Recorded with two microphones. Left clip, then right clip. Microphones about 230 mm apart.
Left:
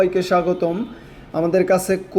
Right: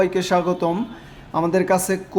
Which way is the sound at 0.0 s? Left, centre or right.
Centre.